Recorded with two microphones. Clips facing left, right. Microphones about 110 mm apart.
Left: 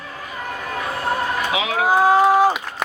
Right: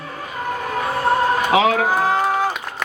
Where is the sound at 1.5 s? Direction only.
45° right (ahead or behind).